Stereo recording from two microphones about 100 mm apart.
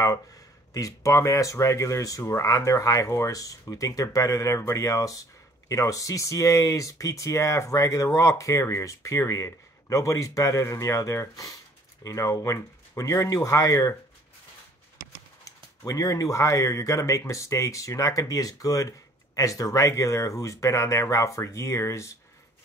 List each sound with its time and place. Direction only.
0.7 s speech: 35° left (ahead or behind)
15.4 s speech: 35° left (ahead or behind)